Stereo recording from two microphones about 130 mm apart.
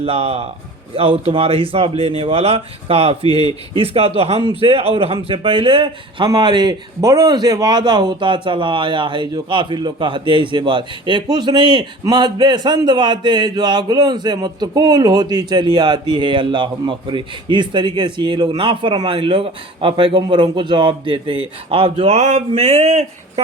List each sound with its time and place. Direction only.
0.0 s speech: 50° right (ahead or behind)